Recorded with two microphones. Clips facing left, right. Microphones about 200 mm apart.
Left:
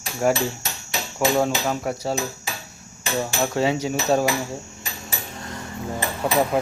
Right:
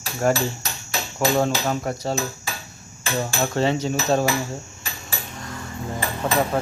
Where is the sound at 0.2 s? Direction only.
10° left (ahead or behind).